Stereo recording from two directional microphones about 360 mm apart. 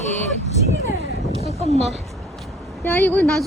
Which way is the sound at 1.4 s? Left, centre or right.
Centre.